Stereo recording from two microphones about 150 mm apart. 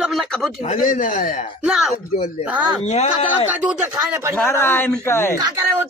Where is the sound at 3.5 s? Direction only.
10° right (ahead or behind).